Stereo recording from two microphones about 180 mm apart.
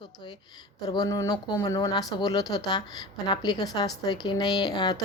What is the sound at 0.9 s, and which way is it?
A woman's voice, 20° left (ahead or behind).